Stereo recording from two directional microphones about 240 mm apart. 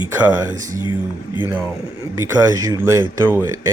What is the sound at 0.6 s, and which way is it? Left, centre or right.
Speech, centre.